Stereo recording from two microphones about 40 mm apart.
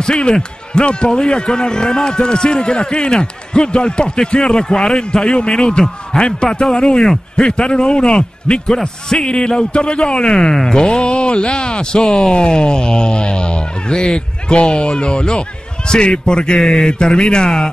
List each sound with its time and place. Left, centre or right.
0.0 s a man's voice: centre